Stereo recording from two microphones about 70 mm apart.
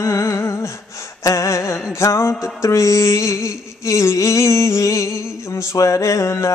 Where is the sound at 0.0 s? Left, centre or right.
Left.